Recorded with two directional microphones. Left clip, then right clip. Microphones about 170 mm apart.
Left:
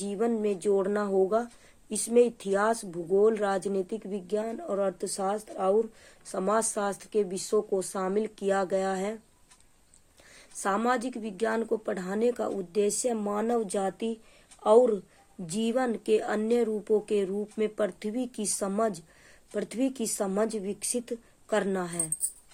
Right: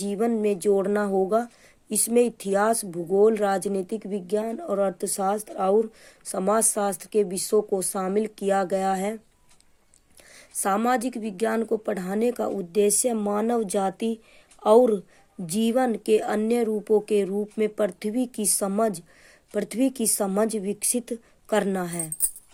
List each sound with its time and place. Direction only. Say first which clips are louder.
0.0 s speech: right 4 dB; 40° right (ahead or behind)
10.3 s speech: right 4 dB; 40° right (ahead or behind)